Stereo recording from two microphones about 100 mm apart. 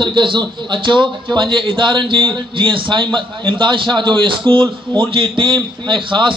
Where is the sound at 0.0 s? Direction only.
55° right (ahead or behind).